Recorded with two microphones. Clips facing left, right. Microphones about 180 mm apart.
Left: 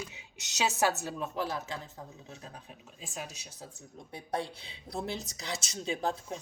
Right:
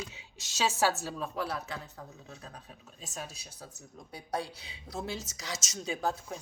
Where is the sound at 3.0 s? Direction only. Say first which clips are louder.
Left 1 dB; 15° left (ahead or behind).